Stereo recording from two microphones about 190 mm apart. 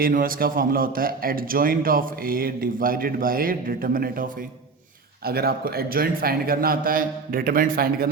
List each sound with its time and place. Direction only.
0.0 s a man's voice: 50° right (ahead or behind)